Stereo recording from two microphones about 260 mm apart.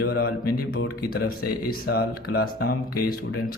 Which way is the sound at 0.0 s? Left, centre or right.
Left.